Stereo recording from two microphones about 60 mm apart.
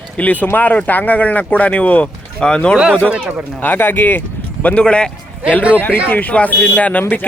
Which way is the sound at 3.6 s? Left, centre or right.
Left.